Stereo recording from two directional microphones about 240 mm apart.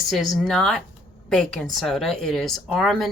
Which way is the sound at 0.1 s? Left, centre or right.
Centre.